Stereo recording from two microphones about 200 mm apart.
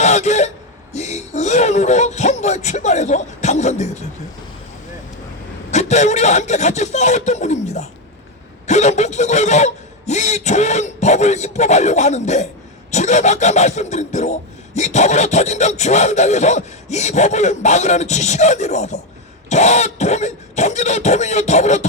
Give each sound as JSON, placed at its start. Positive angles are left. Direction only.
{"t": 0.0, "sound": "throat clearing", "side_deg": 35}
{"t": 0.9, "sound": "speech", "side_deg": 35}
{"t": 5.7, "sound": "speech", "side_deg": 35}